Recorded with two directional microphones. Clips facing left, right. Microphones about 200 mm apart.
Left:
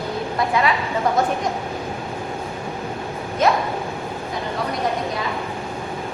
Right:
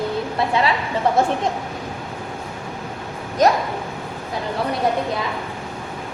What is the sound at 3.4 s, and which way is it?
Speech, 40° right (ahead or behind).